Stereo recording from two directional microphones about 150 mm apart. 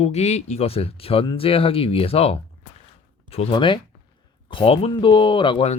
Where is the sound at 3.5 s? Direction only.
35° left (ahead or behind).